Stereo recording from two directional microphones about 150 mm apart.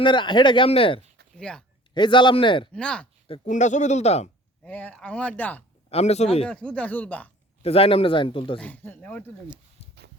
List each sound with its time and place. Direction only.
0.0 s speech: 30° left (ahead or behind)
1.4 s speech: 5° left (ahead or behind)
1.9 s speech: 30° left (ahead or behind)
2.7 s speech: 5° left (ahead or behind)
3.4 s speech: 55° left (ahead or behind)
4.6 s speech: 10° left (ahead or behind)
5.9 s speech: 45° left (ahead or behind)
6.5 s speech: 5° left (ahead or behind)
7.6 s speech: 40° left (ahead or behind)
8.5 s speech: 10° left (ahead or behind)